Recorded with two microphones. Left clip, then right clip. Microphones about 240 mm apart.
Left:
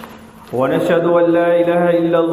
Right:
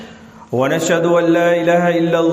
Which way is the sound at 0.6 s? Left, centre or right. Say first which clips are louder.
Left 1 dB; right.